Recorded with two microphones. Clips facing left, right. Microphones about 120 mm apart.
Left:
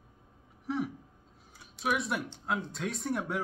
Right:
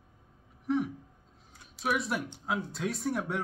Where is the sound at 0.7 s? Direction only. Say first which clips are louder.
Right 4 dB; centre (ahead or behind).